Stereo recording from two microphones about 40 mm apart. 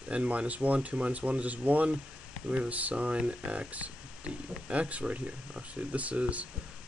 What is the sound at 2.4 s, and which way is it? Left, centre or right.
Speech, right.